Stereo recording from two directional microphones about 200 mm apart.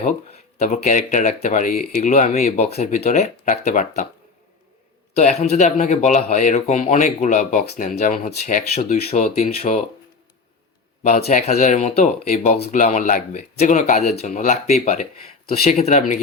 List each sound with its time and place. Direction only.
0.6 s speech: 40° left (ahead or behind)
5.1 s speech: 35° left (ahead or behind)
11.0 s speech: 35° left (ahead or behind)